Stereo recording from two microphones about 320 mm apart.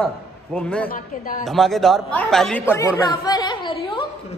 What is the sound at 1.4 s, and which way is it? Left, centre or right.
Speech, centre.